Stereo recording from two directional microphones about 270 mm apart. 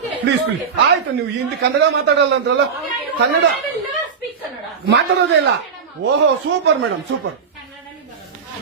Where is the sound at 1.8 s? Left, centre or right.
Right.